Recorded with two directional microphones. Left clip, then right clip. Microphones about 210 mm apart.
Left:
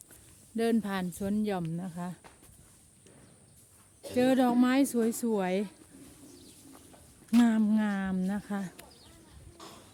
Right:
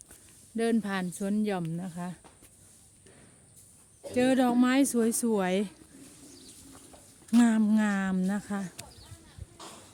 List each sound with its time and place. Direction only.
0.5 s speech: centre (ahead or behind)
4.1 s speech: 5° right (ahead or behind)
7.4 s speech: 5° right (ahead or behind)
9.6 s a sound: 35° right (ahead or behind)